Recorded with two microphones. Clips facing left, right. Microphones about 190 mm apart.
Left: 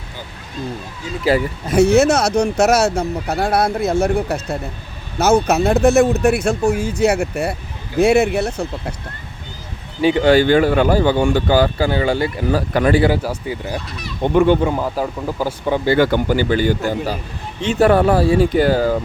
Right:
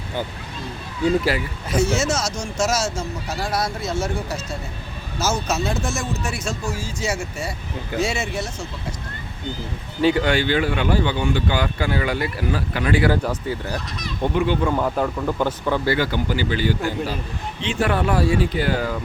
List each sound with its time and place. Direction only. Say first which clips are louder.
1.7 s speech: left 9 dB; 60° left (ahead or behind)
10.0 s speech: left 2 dB; 20° left (ahead or behind)
10.2 s speech: left 8 dB; 45° left (ahead or behind)
13.1 s speech: left 2 dB; 15° left (ahead or behind)
14.3 s speech: left 9 dB; 50° left (ahead or behind)
14.8 s speech: even; 5° left (ahead or behind)
16.0 s speech: left 7 dB; 50° left (ahead or behind); by 19.0 s 35° left (ahead or behind)